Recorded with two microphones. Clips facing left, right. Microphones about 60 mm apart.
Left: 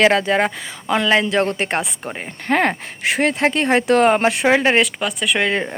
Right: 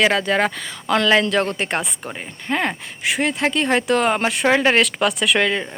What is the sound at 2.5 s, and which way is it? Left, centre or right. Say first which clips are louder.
Speech: left 5 dB; left.